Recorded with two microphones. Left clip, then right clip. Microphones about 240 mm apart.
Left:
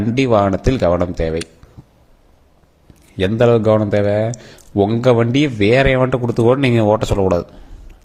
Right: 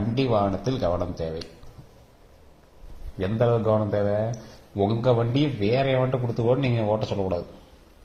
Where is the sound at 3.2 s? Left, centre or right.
Left.